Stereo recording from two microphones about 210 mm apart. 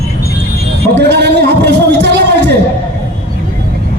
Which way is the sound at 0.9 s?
55° right (ahead or behind).